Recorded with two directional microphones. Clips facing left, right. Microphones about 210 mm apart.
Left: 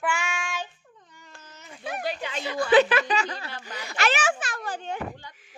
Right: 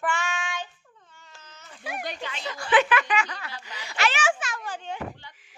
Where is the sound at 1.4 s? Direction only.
10° left (ahead or behind).